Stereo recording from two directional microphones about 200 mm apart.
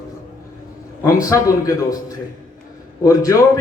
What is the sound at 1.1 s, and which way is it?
Speech, 15° left (ahead or behind).